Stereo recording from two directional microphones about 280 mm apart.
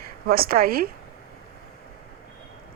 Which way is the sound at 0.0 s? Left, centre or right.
Right.